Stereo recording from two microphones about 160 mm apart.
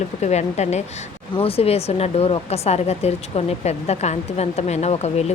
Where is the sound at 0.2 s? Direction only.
45° left (ahead or behind).